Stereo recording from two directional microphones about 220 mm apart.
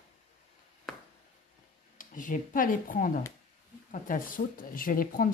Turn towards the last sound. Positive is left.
turn(degrees=40)  # may be behind; listen again after turning